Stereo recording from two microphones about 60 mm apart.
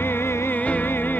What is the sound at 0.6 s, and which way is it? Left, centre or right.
Music, left.